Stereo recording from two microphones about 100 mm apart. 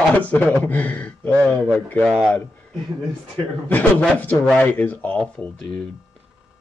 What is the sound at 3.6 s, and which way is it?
A man's voice, 15° left (ahead or behind).